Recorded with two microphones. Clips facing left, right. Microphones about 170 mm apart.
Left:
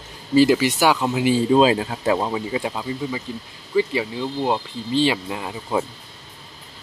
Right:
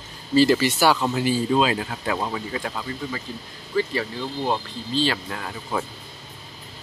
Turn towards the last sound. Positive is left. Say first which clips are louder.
# left 4 dB
turn(degrees=20)  # may be behind; listen again after turning